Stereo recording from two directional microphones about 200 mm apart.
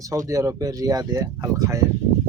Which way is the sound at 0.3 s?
15° right (ahead or behind).